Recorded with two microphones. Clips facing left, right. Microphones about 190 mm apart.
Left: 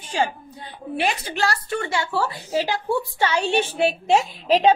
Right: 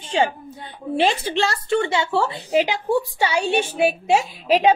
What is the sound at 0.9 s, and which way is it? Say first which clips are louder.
A woman's voice: right 5 dB; 25° right (ahead or behind).